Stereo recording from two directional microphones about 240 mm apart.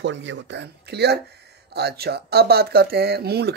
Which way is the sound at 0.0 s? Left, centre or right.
Right.